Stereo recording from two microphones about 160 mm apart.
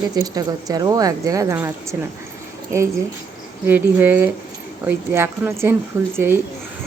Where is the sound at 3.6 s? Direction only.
10° right (ahead or behind).